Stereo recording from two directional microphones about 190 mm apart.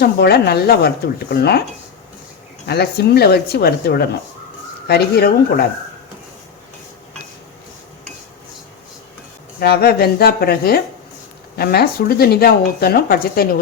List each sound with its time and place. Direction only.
0.0 s speech: 55° left (ahead or behind)
2.6 s speech: 60° left (ahead or behind)
9.6 s speech: 55° left (ahead or behind)